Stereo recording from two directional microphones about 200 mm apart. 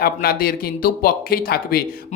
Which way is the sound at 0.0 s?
50° left (ahead or behind).